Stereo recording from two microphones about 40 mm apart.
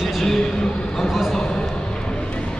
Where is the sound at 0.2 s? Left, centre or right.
Centre.